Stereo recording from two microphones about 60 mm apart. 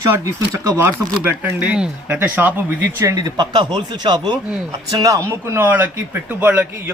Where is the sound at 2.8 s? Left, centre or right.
Right.